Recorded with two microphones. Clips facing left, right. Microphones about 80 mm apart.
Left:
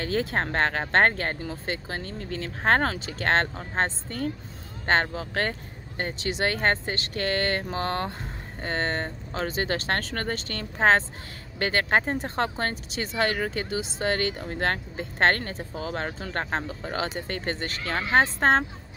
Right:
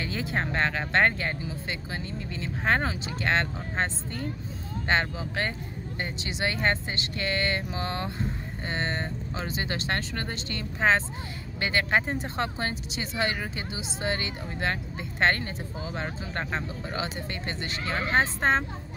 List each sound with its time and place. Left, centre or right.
0.0 s speech: left